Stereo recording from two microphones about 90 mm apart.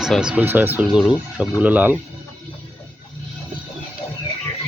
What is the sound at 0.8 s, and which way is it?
Speech, 10° right (ahead or behind).